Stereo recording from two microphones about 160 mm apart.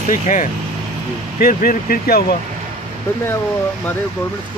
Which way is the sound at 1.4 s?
65° left (ahead or behind).